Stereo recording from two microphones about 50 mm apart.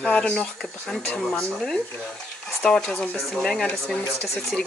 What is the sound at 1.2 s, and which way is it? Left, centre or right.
Speech, centre.